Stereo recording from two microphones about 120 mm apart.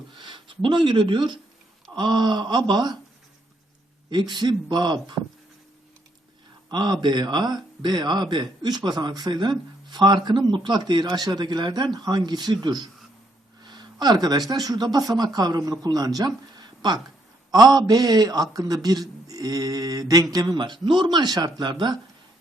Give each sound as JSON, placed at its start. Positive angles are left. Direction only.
{"t": 0.2, "sound": "speech", "side_deg": -45}
{"t": 4.1, "sound": "speech", "side_deg": -40}
{"t": 6.7, "sound": "speech", "side_deg": -35}